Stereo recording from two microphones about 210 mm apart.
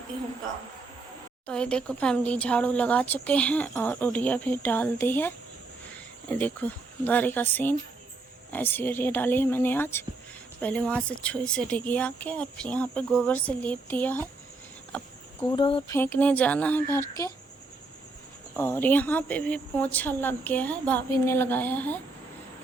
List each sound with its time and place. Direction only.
1.5 s speech: 5° left (ahead or behind)
15.4 s speech: 25° left (ahead or behind)
15.9 s speech: 10° left (ahead or behind)
18.5 s speech: 10° left (ahead or behind)